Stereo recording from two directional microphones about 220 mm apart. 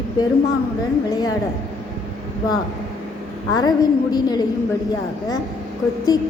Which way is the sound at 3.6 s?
20° left (ahead or behind).